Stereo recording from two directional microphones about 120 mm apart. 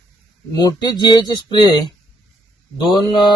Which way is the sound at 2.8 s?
40° left (ahead or behind).